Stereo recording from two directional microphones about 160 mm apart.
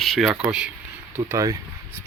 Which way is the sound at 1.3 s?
20° right (ahead or behind).